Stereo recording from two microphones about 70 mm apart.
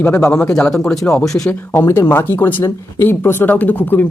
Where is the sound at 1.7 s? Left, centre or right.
Left.